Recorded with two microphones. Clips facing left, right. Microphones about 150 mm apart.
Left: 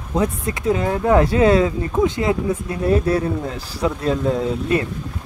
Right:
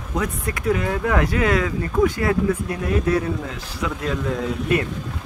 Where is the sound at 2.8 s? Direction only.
30° left (ahead or behind).